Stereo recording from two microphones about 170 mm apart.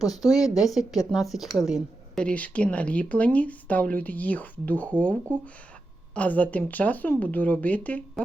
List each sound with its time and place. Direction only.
0.1 s speech: 20° left (ahead or behind)
0.4 s a woman's voice: centre (ahead or behind)